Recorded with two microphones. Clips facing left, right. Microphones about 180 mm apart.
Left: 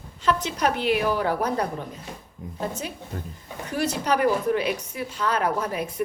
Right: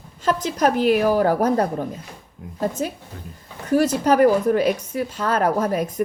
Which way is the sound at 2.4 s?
5° right (ahead or behind).